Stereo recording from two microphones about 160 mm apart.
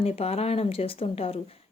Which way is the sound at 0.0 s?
40° left (ahead or behind).